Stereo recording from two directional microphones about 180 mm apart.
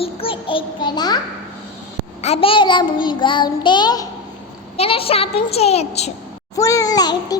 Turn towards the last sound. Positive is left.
turn(degrees=20)  # may be behind; listen again after turning